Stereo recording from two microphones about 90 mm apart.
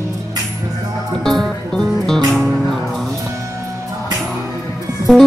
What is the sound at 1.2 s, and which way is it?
Music, 5° left (ahead or behind).